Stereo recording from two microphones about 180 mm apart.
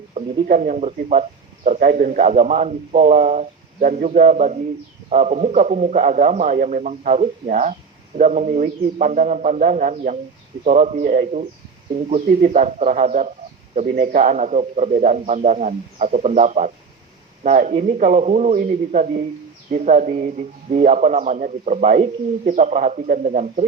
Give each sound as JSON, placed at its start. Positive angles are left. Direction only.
{"t": 0.4, "sound": "a man's voice", "side_deg": -45}
{"t": 13.7, "sound": "a man's voice", "side_deg": -55}